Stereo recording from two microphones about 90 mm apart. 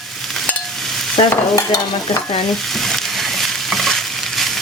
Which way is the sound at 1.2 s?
90° left.